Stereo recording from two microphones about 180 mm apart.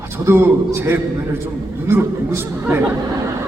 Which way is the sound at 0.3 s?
10° right (ahead or behind).